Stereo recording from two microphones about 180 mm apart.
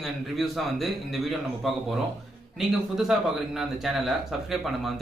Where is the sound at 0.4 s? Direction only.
Centre (ahead or behind).